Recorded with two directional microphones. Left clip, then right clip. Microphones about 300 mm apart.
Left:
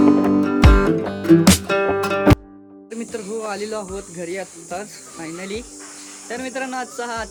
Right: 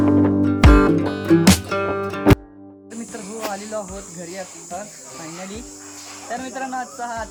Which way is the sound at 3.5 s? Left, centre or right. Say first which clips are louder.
Even; centre.